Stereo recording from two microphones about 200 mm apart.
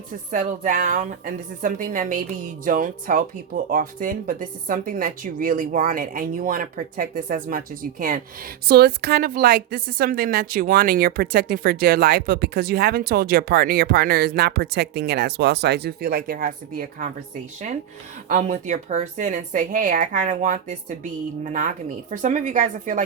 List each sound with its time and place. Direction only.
0.3 s a woman's voice: 40° right (ahead or behind)
18.3 s speech: 40° right (ahead or behind)